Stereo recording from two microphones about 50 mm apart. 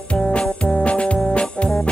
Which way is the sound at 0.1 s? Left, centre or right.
Left.